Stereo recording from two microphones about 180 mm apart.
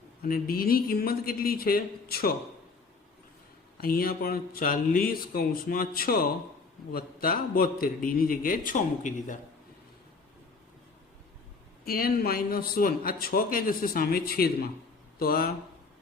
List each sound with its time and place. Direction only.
0.2 s a man's voice: 55° left (ahead or behind)
3.8 s a man's voice: 55° left (ahead or behind)
11.9 s a man's voice: 55° left (ahead or behind)